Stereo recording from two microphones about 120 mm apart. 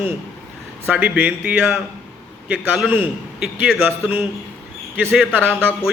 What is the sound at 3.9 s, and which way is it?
A man's voice, 15° right (ahead or behind).